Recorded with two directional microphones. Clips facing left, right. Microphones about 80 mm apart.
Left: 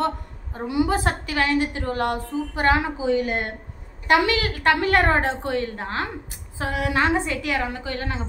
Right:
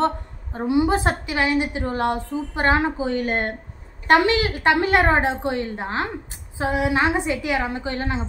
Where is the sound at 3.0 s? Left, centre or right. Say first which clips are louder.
Even; right.